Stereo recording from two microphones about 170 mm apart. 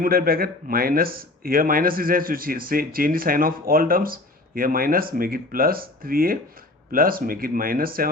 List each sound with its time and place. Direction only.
0.0 s speech: 60° right (ahead or behind)